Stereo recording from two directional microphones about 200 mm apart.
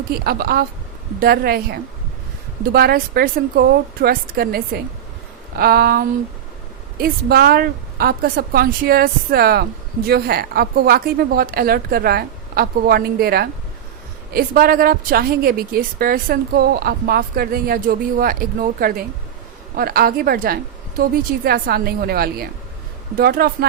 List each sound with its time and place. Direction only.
0.1 s a woman's voice: 50° right (ahead or behind)